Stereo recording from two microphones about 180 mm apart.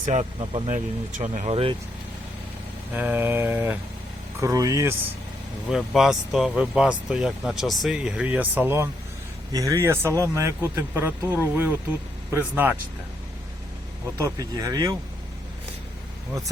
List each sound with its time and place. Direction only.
0.0 s speech: 45° right (ahead or behind)
0.3 s speech: 30° right (ahead or behind)
1.1 s speech: 40° right (ahead or behind)
2.9 s speech: 10° right (ahead or behind)
5.7 s speech: centre (ahead or behind)
14.2 s speech: 20° right (ahead or behind)